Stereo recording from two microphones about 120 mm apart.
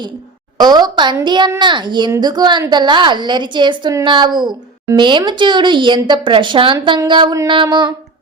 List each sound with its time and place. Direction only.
0.6 s speech: 35° right (ahead or behind)